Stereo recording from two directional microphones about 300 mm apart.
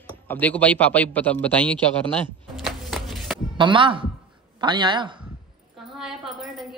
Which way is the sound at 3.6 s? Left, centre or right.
Centre.